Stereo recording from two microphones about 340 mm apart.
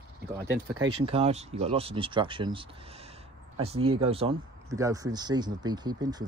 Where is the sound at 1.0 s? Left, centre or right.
Centre.